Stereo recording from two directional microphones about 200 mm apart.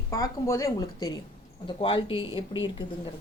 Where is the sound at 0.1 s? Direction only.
15° left (ahead or behind).